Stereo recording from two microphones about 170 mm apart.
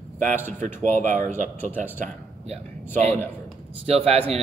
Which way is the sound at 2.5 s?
40° right (ahead or behind).